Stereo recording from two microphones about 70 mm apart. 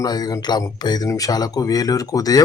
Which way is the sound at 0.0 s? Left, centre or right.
Left.